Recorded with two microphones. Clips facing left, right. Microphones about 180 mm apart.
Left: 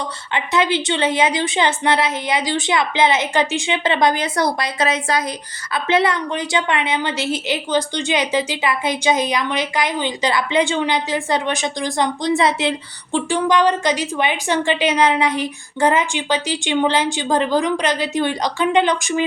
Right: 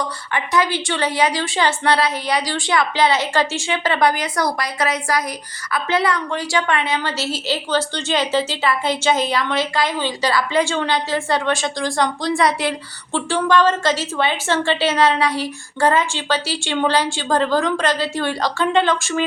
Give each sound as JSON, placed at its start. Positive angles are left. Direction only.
{"t": 0.3, "sound": "a woman's voice", "side_deg": 25}